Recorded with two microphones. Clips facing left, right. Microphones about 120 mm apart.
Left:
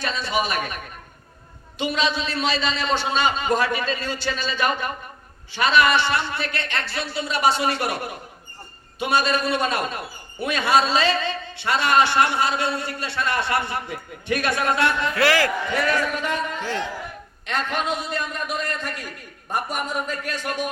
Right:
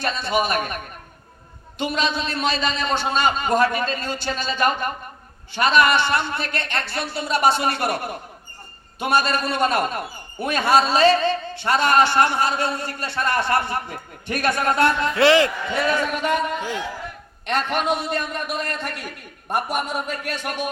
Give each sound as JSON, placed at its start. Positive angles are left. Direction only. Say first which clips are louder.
{"t": 0.0, "sound": "a man's voice", "louder": "right 2 dB", "side_deg": -55}
{"t": 1.8, "sound": "a man's voice", "louder": "even", "side_deg": -50}
{"t": 9.0, "sound": "a man's voice", "louder": "right 1 dB", "side_deg": -50}
{"t": 15.1, "sound": "a man's voice", "louder": "right 4 dB", "side_deg": -25}
{"t": 16.6, "sound": "a man's voice", "louder": "even", "side_deg": -15}
{"t": 17.4, "sound": "a man's voice", "louder": "right 3 dB", "side_deg": -60}